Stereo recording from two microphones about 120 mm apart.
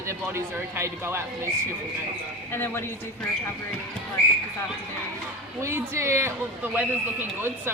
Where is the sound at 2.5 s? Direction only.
20° left (ahead or behind).